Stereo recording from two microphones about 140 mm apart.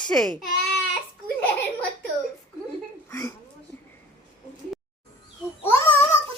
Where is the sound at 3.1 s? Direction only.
20° left (ahead or behind).